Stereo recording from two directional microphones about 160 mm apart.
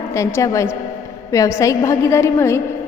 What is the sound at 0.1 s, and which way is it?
A woman's voice, 15° left (ahead or behind).